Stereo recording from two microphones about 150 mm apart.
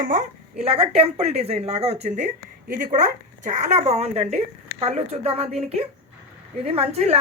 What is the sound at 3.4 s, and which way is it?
A woman's voice, 55° right (ahead or behind).